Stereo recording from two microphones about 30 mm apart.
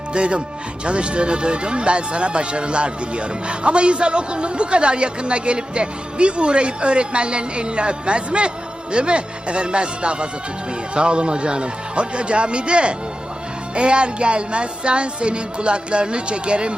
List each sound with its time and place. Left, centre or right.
0.1 s speech: right